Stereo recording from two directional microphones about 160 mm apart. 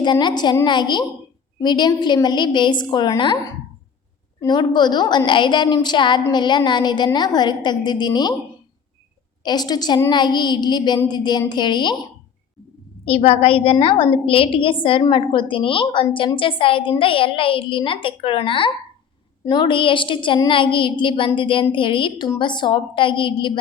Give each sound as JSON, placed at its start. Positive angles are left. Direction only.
{"t": 0.0, "sound": "a woman's voice", "side_deg": 30}
{"t": 4.4, "sound": "a woman's voice", "side_deg": 25}
{"t": 9.4, "sound": "a woman's voice", "side_deg": 25}
{"t": 13.1, "sound": "a woman's voice", "side_deg": 35}